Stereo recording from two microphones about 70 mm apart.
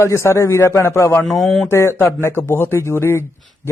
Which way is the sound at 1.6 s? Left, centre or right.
Left.